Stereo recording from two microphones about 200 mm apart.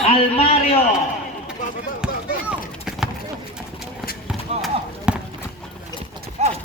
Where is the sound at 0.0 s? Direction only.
30° left (ahead or behind).